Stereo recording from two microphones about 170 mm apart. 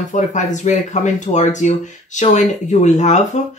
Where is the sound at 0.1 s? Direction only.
45° left (ahead or behind).